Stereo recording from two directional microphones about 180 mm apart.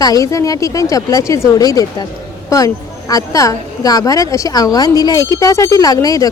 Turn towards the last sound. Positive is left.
turn(degrees=20)  # may be behind; listen again after turning